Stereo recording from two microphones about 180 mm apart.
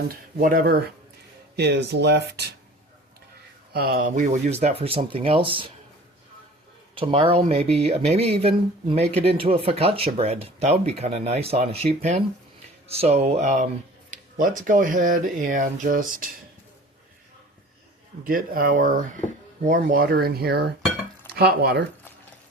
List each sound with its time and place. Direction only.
0.1 s speech: 50° right (ahead or behind); by 2.5 s 65° right (ahead or behind)
3.7 s speech: 55° right (ahead or behind); by 5.7 s 30° right (ahead or behind)
6.9 s speech: 30° right (ahead or behind); by 16.3 s 50° right (ahead or behind)
18.3 s speech: 50° right (ahead or behind)